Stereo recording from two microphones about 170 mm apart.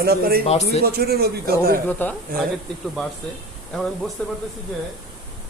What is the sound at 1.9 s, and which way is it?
Speech, 10° left (ahead or behind).